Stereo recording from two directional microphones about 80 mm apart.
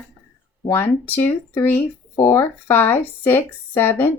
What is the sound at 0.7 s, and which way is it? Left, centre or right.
Speech, left.